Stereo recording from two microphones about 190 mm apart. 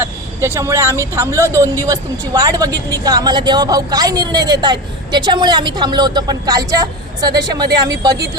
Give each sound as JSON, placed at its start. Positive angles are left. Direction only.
{"t": 0.0, "sound": "speech", "side_deg": -15}